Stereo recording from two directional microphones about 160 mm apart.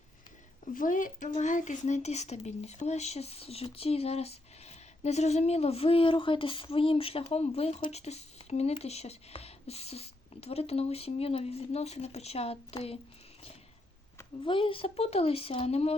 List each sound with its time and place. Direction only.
0.6 s speech: 55° left (ahead or behind); by 13.0 s 40° left (ahead or behind)
14.4 s speech: 35° left (ahead or behind)